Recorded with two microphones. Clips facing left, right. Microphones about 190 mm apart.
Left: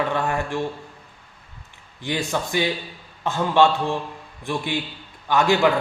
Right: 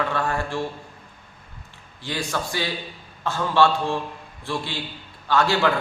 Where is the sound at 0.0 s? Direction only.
20° left (ahead or behind).